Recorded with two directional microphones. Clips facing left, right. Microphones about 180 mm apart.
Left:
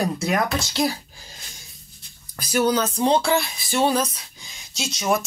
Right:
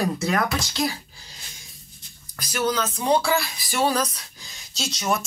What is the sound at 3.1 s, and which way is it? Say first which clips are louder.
Speech: right 3 dB; 20° left (ahead or behind).